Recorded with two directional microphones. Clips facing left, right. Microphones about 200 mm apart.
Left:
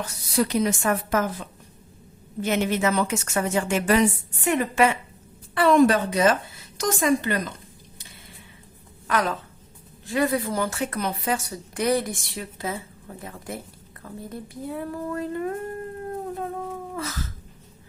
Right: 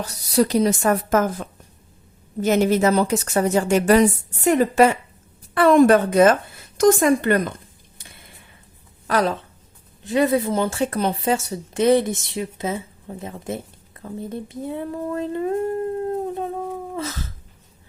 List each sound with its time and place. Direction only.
0.0 s a woman's voice: 35° right (ahead or behind)
5.5 s a woman's voice: 50° right (ahead or behind)
9.0 s a woman's voice: 35° right (ahead or behind)
10.0 s speech: 20° right (ahead or behind)
16.0 s howl: 25° right (ahead or behind)
16.9 s speech: 25° right (ahead or behind)